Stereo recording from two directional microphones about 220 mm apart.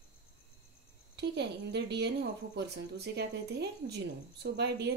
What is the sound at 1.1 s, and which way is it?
A woman's voice, 50° right (ahead or behind).